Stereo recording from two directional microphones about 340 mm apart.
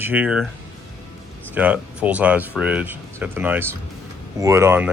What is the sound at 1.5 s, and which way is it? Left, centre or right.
Speech, centre.